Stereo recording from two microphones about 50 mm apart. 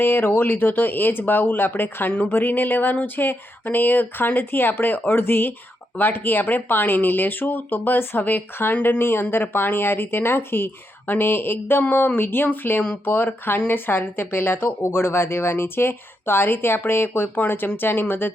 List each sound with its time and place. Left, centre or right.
0.0 s speech: left
9.0 s speech: left